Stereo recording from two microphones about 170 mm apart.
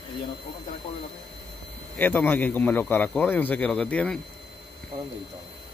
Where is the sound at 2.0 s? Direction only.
10° left (ahead or behind).